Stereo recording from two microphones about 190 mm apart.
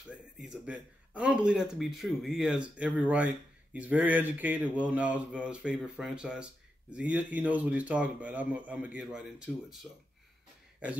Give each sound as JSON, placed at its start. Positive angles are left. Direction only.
{"t": 0.1, "sound": "speech", "side_deg": -5}